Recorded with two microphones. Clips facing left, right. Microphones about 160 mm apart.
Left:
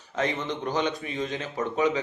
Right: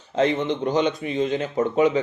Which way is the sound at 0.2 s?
30° right (ahead or behind).